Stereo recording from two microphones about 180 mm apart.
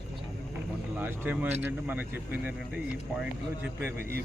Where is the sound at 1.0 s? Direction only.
10° right (ahead or behind).